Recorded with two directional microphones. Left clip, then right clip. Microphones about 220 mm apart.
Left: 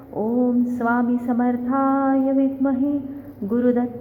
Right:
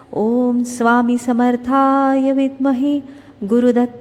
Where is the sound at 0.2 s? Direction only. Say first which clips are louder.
Right 4 dB; 40° right (ahead or behind).